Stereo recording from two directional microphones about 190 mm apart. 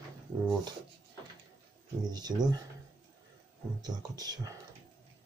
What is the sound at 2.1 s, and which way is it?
Speech, 20° right (ahead or behind).